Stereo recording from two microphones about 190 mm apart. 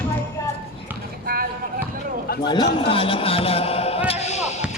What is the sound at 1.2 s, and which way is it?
Basketball bounce, 50° right (ahead or behind).